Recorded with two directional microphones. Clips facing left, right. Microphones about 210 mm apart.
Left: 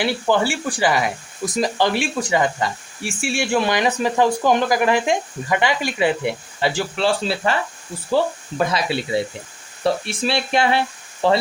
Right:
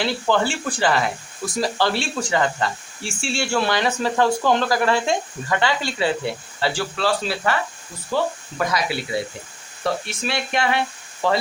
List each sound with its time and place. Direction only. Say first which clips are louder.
0.0 s speech: left 2 dB; 10° left (ahead or behind); by 11.3 s 30° left (ahead or behind)